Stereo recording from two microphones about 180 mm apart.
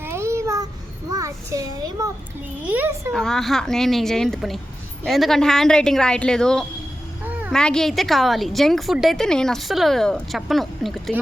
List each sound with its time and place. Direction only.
0.0 s babbling: 15° right (ahead or behind)
1.1 s a child's voice: 20° right (ahead or behind)
3.1 s a woman's voice: 5° left (ahead or behind)